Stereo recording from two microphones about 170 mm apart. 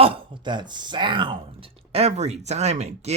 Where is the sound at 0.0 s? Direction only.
30° right (ahead or behind).